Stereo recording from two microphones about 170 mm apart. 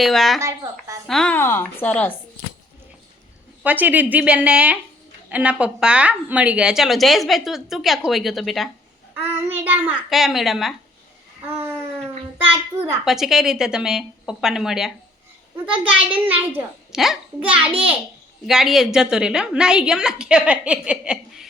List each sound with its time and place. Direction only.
0.0 s speech: centre (ahead or behind)
0.3 s speech: 20° right (ahead or behind)
1.0 s a woman's voice: 5° left (ahead or behind)
3.6 s a child's voice: 10° right (ahead or behind)
9.2 s a child's voice: 10° right (ahead or behind)
12.5 s a child's voice: 10° right (ahead or behind)
13.1 s speech: centre (ahead or behind)
16.0 s a child's voice: 10° right (ahead or behind)